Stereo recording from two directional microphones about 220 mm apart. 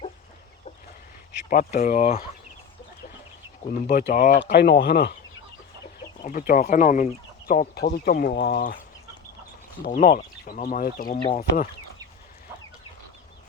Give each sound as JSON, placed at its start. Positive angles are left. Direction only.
{"t": 1.5, "sound": "speech", "side_deg": 35}
{"t": 3.8, "sound": "speech", "side_deg": 45}
{"t": 4.4, "sound": "speech", "side_deg": 50}
{"t": 6.2, "sound": "speech", "side_deg": 40}
{"t": 9.8, "sound": "speech", "side_deg": 40}